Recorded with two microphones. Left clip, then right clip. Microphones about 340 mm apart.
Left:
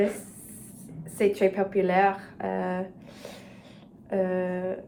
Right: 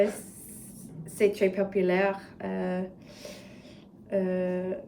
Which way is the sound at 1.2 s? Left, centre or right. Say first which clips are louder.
Left 1 dB; centre.